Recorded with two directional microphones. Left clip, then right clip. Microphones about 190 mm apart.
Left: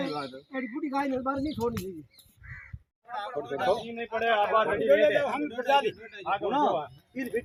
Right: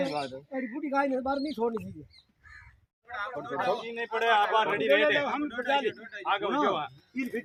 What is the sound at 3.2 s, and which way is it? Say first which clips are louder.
Speech: left 1 dB; 10° left (ahead or behind).